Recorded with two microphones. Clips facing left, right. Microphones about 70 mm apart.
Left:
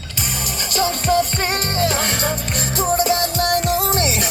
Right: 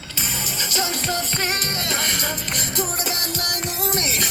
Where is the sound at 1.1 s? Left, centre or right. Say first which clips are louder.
Left 7 dB; left.